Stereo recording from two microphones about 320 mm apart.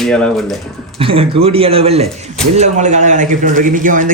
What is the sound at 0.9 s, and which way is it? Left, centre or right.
Speech, centre.